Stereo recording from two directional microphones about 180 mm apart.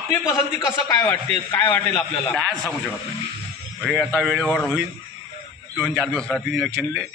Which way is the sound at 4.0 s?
5° left (ahead or behind).